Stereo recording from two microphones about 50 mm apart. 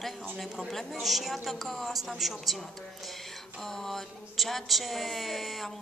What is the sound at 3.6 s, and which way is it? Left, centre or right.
A woman's voice, centre.